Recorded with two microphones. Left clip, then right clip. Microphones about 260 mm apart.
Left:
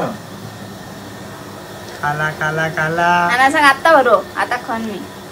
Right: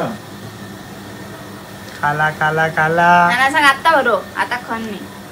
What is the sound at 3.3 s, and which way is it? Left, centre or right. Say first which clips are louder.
A woman's voice: left 1 dB; left.